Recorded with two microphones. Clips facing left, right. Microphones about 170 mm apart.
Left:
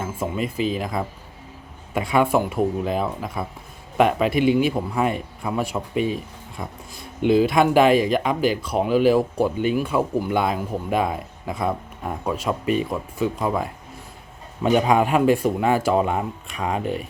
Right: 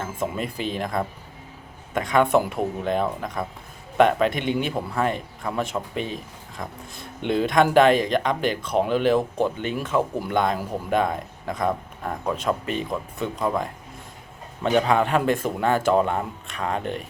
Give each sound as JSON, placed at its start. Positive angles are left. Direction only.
{"t": 0.0, "sound": "speech", "side_deg": 5}